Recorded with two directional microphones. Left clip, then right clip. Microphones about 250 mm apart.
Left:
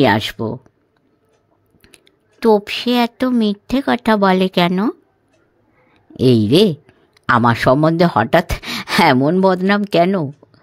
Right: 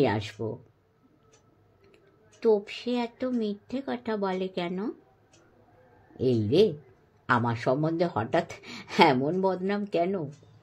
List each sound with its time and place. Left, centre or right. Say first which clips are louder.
0.0 s speech: left 12 dB; left
2.4 s a woman's voice: left 11 dB; left
6.1 s speech: left 11 dB; left